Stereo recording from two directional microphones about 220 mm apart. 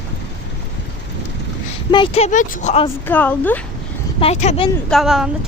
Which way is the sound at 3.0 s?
5° left (ahead or behind).